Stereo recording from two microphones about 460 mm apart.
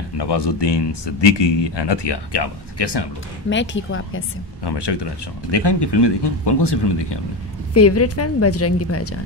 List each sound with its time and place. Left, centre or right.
0.2 s speech: left
3.4 s speech: left
4.6 s speech: left
7.7 s a woman's voice: left